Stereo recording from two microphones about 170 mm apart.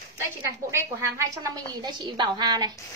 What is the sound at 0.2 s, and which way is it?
A woman's voice, 15° right (ahead or behind).